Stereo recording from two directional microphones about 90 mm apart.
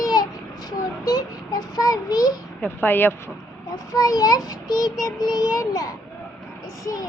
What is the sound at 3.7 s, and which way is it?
Child singing, 45° left (ahead or behind).